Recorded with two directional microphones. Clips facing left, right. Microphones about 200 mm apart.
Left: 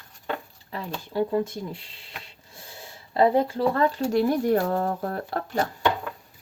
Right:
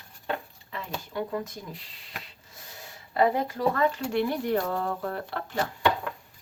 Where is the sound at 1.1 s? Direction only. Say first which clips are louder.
Left 8 dB; 30° left (ahead or behind).